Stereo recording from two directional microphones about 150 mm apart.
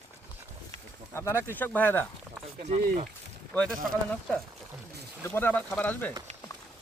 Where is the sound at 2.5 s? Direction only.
50° right (ahead or behind).